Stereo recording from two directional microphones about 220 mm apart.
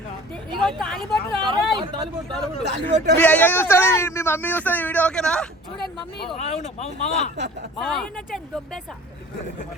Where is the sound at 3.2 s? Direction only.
10° left (ahead or behind).